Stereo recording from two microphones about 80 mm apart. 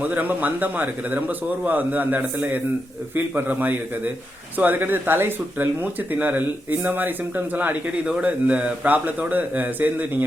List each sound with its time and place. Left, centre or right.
0.0 s speech: centre